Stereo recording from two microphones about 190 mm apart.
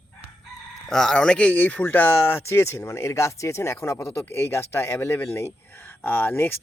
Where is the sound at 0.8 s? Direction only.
5° left (ahead or behind).